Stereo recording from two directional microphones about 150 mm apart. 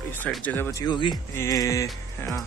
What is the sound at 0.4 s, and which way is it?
Speech, 10° left (ahead or behind).